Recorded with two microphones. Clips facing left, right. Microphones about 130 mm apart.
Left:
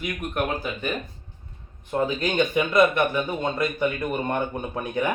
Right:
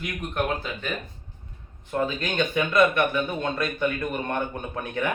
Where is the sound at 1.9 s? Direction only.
15° left (ahead or behind).